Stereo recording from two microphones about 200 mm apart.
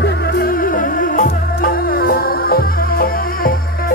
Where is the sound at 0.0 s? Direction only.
55° left (ahead or behind).